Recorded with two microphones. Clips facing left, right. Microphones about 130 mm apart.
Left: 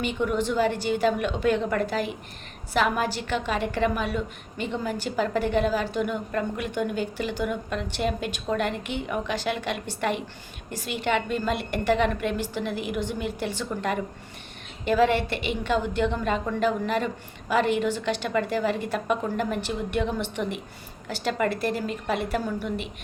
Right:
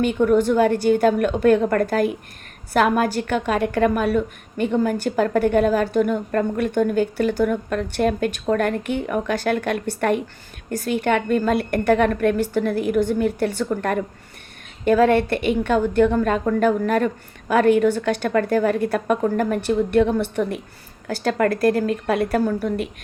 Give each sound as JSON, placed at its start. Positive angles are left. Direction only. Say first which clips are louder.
{"t": 0.0, "sound": "a woman's voice", "louder": "right 9 dB", "side_deg": -50}
{"t": 21.3, "sound": "speech", "louder": "right 9 dB", "side_deg": -60}